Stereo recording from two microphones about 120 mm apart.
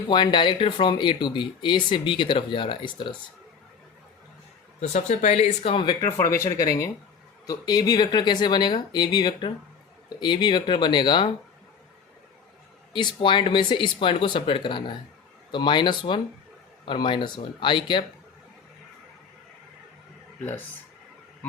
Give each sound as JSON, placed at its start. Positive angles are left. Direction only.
{"t": 0.1, "sound": "speech", "side_deg": 40}
{"t": 4.8, "sound": "speech", "side_deg": 75}
{"t": 5.7, "sound": "speech", "side_deg": 40}
{"t": 6.1, "sound": "speech", "side_deg": 25}
{"t": 12.9, "sound": "speech", "side_deg": 40}